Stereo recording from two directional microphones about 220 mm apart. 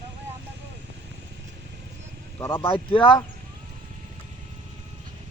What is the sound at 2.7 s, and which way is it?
Speech, 25° left (ahead or behind).